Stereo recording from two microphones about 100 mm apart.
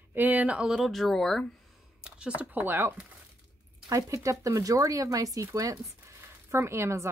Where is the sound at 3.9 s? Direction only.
30° right (ahead or behind).